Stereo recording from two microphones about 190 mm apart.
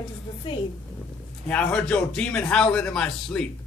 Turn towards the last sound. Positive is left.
turn(degrees=5)  # may be behind; listen again after turning